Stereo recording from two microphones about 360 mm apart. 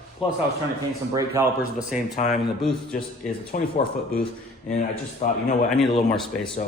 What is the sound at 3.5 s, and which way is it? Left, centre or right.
Speech, left.